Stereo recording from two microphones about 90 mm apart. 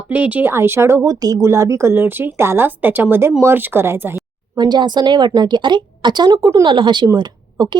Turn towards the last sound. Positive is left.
turn(degrees=-55)  # may be behind; listen again after turning